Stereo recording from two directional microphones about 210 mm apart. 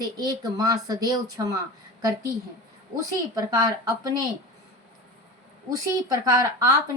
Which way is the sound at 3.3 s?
15° right (ahead or behind).